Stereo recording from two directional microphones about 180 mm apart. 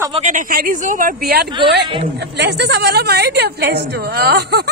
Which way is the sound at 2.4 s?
70° right (ahead or behind).